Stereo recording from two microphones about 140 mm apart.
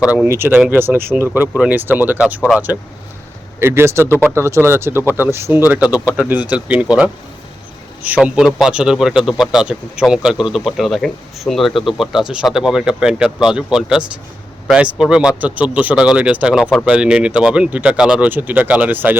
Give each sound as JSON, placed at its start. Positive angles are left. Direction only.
{"t": 0.0, "sound": "speech", "side_deg": -5}
{"t": 3.6, "sound": "a man's voice", "side_deg": -15}